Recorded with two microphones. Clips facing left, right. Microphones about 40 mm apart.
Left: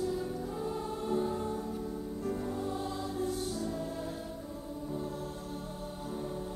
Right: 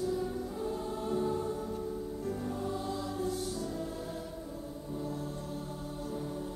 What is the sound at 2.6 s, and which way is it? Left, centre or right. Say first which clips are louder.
Music: even; left.